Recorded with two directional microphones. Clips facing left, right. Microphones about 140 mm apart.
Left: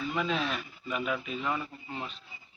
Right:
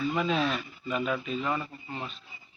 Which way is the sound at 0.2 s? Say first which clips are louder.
Right 3 dB; centre (ahead or behind).